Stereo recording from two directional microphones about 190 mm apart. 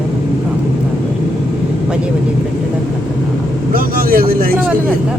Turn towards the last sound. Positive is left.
turn(degrees=-50)  # may be behind; listen again after turning